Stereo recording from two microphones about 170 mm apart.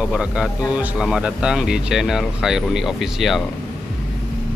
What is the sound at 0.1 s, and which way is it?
Speech, 5° right (ahead or behind).